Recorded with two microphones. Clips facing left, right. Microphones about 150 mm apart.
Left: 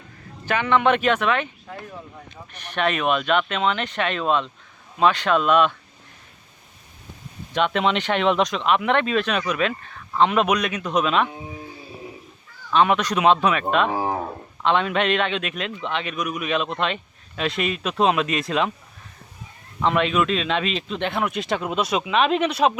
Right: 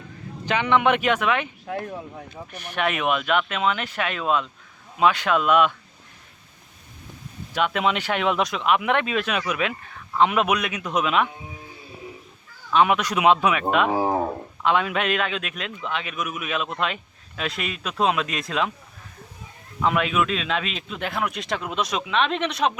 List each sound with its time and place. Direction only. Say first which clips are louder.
0.4 s speech: left 1 dB; 15° right (ahead or behind)
1.6 s speech: right 7 dB; 70° right (ahead or behind)
2.5 s speech: left 2 dB; 10° right (ahead or behind)
7.5 s speech: left 2 dB; 10° right (ahead or behind)
12.7 s speech: left 1 dB; 10° right (ahead or behind)
19.8 s speech: left 2 dB; 5° right (ahead or behind)